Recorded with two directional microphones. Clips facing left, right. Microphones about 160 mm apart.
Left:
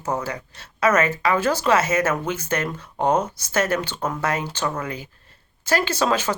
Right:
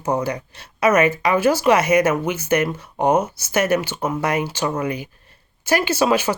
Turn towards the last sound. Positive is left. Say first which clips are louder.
# right 4 dB
turn(degrees=-10)  # may be behind; listen again after turning